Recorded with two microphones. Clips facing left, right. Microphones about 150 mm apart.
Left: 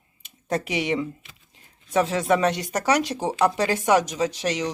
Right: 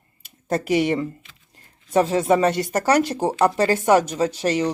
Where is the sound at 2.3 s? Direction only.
Centre (ahead or behind).